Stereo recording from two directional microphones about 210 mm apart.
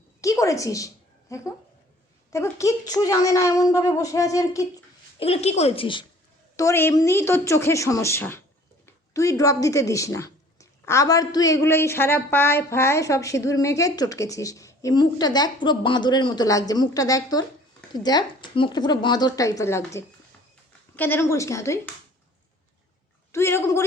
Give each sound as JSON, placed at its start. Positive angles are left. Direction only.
{"t": 0.2, "sound": "a woman's voice", "side_deg": 15}
{"t": 5.2, "sound": "speech", "side_deg": 30}
{"t": 6.6, "sound": "a woman's voice", "side_deg": 10}
{"t": 23.3, "sound": "a woman's voice", "side_deg": 10}